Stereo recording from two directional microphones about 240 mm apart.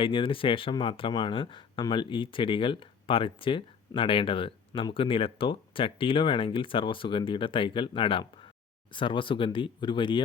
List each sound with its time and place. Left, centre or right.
0.0 s speech: left